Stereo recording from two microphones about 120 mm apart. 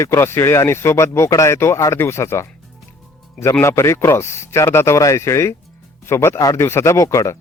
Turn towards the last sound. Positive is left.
turn(degrees=25)  # may be behind; listen again after turning